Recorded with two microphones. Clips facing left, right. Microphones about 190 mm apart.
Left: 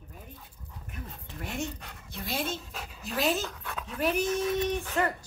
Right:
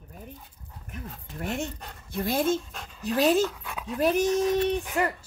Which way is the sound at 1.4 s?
50° right (ahead or behind).